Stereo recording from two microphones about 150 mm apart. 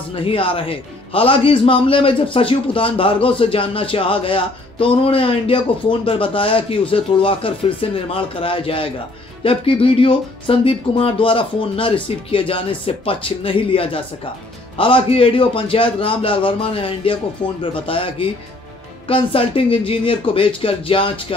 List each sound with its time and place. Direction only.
0.1 s speech: 35° left (ahead or behind)